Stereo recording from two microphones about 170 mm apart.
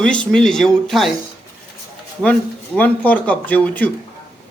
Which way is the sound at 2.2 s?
10° left (ahead or behind).